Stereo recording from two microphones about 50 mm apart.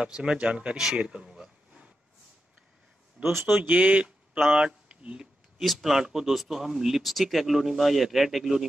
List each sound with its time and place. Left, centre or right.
0.0 s speech: centre
0.9 s a sound: centre
3.2 s speech: right
4.5 s speech: centre
5.6 s speech: centre